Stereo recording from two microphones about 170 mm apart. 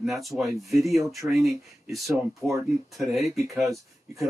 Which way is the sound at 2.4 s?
20° right (ahead or behind).